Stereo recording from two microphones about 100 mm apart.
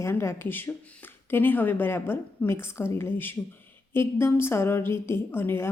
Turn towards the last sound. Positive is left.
turn(degrees=20)  # may be behind; listen again after turning